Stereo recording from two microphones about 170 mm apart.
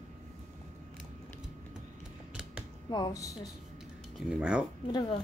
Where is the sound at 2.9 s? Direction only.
20° left (ahead or behind).